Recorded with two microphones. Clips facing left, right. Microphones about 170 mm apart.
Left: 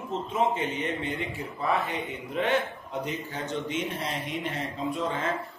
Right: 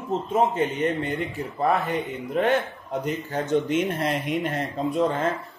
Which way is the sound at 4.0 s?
60° right (ahead or behind).